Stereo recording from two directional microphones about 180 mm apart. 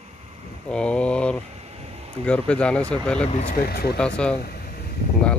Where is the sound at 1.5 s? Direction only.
35° right (ahead or behind).